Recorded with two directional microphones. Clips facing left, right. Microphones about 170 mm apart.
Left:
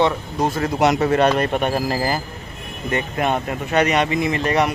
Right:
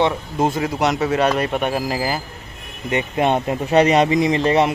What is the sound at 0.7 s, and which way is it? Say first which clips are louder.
Speech: left 5 dB; centre (ahead or behind).